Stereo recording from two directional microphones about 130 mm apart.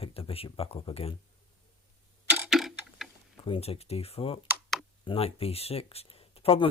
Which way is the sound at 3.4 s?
45° left (ahead or behind).